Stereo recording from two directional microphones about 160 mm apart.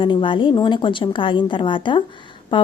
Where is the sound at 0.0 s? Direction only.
30° left (ahead or behind).